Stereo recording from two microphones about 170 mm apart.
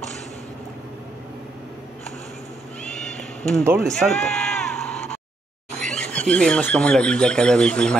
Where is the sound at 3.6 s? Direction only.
15° right (ahead or behind).